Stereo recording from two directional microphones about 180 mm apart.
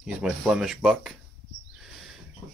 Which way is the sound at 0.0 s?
5° right (ahead or behind).